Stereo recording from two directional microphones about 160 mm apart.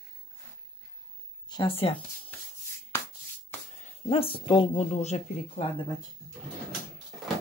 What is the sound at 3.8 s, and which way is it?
Speech, 35° left (ahead or behind).